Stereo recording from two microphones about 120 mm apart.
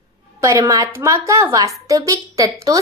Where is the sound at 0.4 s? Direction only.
25° right (ahead or behind).